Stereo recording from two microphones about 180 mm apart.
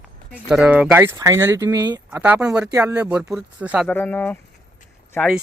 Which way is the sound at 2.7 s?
20° right (ahead or behind).